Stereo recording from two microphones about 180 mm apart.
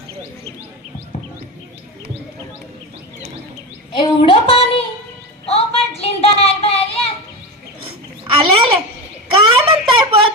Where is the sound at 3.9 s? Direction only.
25° left (ahead or behind).